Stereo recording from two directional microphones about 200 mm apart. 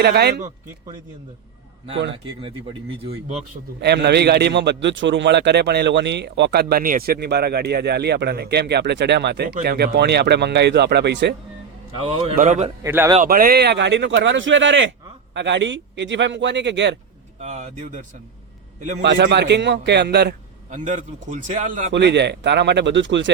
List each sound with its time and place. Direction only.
0.0 s speech: 55° right (ahead or behind)
2.4 s speech: 25° right (ahead or behind)
3.8 s a man's voice: 55° right (ahead or behind)
12.0 s a man's voice: 35° right (ahead or behind)
12.8 s speech: 15° right (ahead or behind)
13.2 s a man's voice: 45° right (ahead or behind); by 17.0 s 60° right (ahead or behind)
17.4 s a man's voice: 35° right (ahead or behind)
19.0 s a man's voice: 60° right (ahead or behind)
20.7 s a man's voice: 40° right (ahead or behind)
21.9 s a man's voice: 60° right (ahead or behind)